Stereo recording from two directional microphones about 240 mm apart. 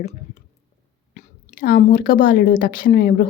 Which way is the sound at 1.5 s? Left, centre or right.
Left.